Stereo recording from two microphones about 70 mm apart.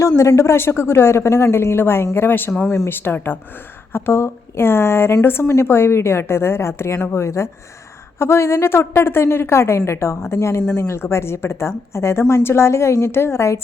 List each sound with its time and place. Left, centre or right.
0.2 s a woman's voice: left